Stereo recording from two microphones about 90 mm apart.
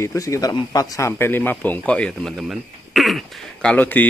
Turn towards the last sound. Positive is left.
turn(degrees=10)  # may be behind; listen again after turning